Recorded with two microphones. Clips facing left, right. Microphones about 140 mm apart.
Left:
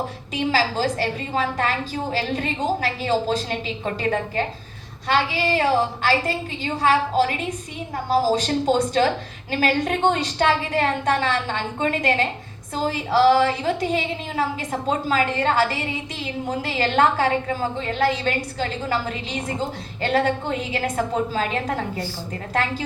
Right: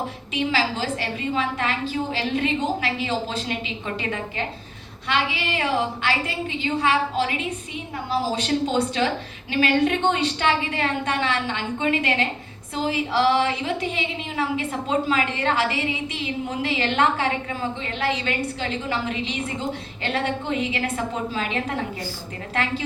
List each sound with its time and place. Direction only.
0.3 s a woman's voice: 40° left (ahead or behind)